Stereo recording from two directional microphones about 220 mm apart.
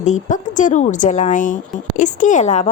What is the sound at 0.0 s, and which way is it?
A woman's voice, 35° left (ahead or behind).